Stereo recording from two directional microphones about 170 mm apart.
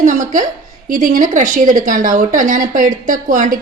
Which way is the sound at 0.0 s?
50° right (ahead or behind).